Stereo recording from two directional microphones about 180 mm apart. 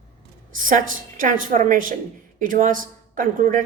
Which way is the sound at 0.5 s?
45° right (ahead or behind).